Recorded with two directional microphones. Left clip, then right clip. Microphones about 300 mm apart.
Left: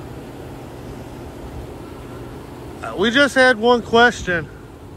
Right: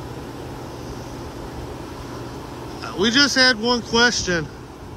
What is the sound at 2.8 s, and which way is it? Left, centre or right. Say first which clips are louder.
Speech: left 2 dB; centre.